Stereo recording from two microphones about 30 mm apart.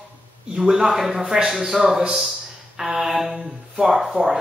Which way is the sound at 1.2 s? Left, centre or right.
Right.